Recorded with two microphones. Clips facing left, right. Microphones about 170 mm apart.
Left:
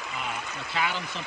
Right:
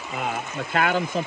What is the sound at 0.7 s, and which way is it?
Speech, 50° right (ahead or behind).